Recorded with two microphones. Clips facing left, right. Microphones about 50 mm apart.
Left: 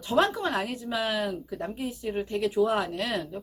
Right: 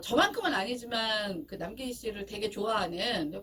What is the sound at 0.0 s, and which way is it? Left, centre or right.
Speech, centre.